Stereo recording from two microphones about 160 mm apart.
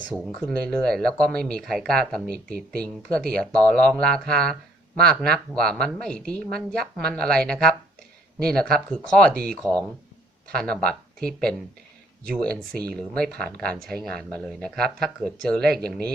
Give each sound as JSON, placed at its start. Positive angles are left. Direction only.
{"t": 0.3, "sound": "a woman's voice", "side_deg": 5}